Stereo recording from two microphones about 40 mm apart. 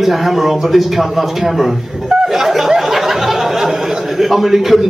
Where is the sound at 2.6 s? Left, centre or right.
Centre.